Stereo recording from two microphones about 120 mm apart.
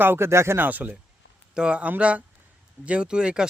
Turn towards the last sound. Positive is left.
turn(degrees=-5)  # may be behind; listen again after turning